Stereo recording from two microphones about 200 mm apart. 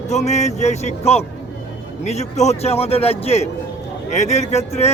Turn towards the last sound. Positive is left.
turn(degrees=35)  # may be behind; listen again after turning